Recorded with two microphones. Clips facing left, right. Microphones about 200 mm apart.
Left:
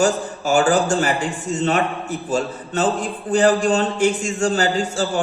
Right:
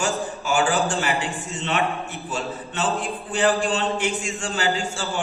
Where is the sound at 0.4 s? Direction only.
40° left (ahead or behind).